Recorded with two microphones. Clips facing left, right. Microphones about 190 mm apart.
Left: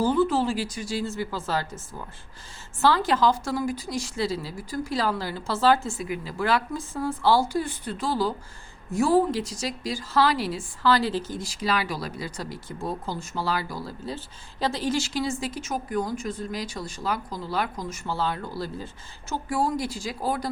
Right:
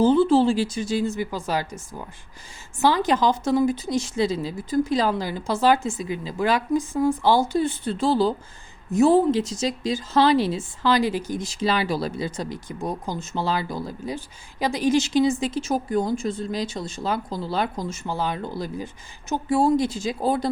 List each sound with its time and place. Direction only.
0.0 s speech: 25° right (ahead or behind)